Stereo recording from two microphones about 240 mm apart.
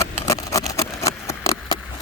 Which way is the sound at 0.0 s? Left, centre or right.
Centre.